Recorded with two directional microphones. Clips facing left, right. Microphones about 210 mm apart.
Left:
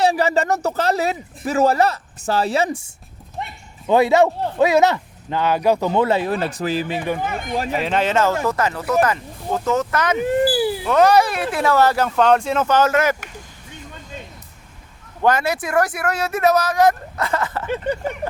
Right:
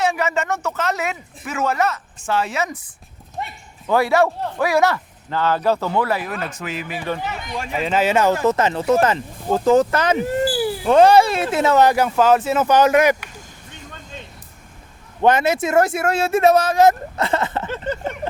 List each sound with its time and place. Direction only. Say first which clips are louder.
0.0 s speech: left 3 dB; 35° left (ahead or behind)
7.2 s speech: left 4 dB; 50° left (ahead or behind)
7.7 s speech: right 2 dB; centre (ahead or behind)
8.4 s speech: right 4 dB; 20° right (ahead or behind)
15.2 s speech: right 2 dB; 20° right (ahead or behind)